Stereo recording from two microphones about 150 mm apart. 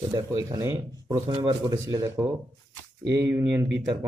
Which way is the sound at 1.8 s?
25° right (ahead or behind).